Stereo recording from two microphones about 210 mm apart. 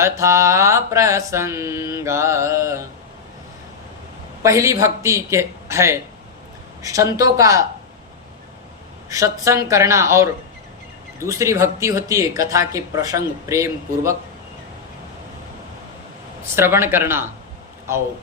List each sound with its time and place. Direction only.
0.0 s speech: 15° right (ahead or behind)
4.4 s speech: 15° right (ahead or behind)
9.0 s speech: 15° right (ahead or behind)
11.3 s speech: 15° right (ahead or behind)
16.6 s speech: 10° right (ahead or behind)